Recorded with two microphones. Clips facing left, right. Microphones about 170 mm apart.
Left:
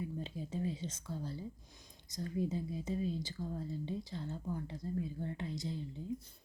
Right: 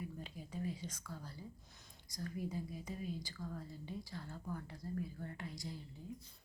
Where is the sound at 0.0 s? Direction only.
25° left (ahead or behind).